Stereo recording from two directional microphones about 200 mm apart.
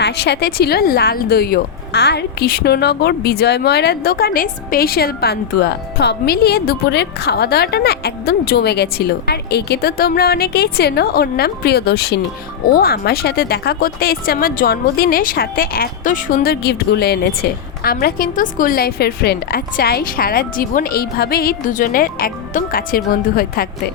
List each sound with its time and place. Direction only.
0.0 s speech: 55° left (ahead or behind)